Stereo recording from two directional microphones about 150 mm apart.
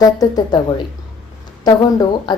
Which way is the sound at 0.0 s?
25° left (ahead or behind).